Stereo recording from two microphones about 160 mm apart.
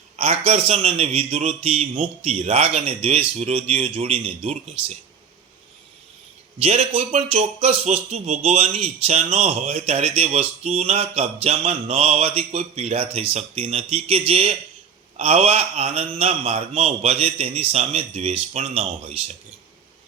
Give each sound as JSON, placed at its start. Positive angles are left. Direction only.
{"t": 0.2, "sound": "a man's voice", "side_deg": -45}
{"t": 6.6, "sound": "a man's voice", "side_deg": -40}